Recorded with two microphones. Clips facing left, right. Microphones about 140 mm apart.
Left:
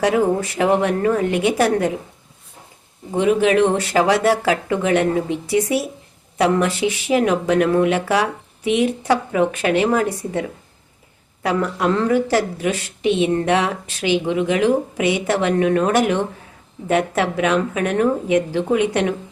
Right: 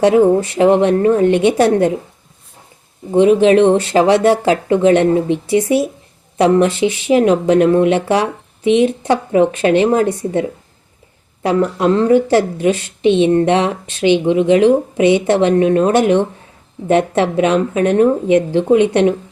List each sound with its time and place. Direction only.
0.0 s a woman's voice: 25° right (ahead or behind)
3.1 s a woman's voice: 25° right (ahead or behind)
11.4 s a woman's voice: 25° right (ahead or behind)